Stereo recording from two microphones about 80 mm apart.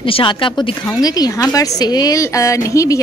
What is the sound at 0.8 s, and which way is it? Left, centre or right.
Speech, left.